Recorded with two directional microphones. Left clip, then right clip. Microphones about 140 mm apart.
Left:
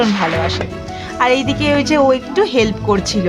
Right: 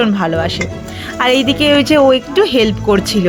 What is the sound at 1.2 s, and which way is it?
Speech, 20° right (ahead or behind).